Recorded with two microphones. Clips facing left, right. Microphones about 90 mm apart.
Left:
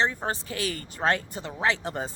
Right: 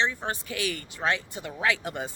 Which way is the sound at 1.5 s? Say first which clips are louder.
Left 1 dB; 30° left (ahead or behind).